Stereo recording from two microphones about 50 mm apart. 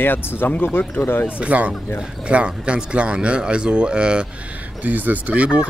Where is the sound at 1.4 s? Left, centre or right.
Right.